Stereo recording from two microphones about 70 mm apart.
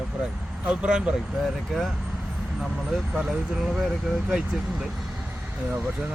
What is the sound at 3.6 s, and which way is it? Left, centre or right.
Speech, centre.